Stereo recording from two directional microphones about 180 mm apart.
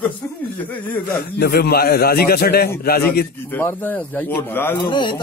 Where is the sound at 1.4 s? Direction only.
60° left (ahead or behind).